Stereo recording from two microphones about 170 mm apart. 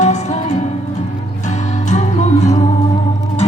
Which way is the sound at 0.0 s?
45° left (ahead or behind).